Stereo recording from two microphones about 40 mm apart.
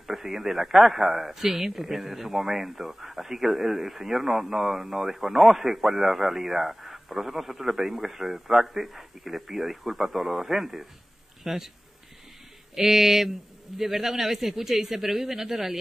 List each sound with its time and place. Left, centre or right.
0.0 s a man's voice: centre
12.7 s a man's voice: centre